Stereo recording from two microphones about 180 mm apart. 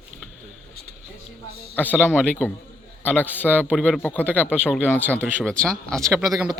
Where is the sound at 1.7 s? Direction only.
10° left (ahead or behind).